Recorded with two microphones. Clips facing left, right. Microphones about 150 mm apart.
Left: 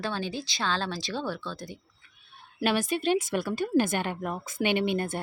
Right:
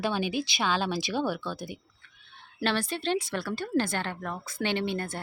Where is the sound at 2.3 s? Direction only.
10° left (ahead or behind).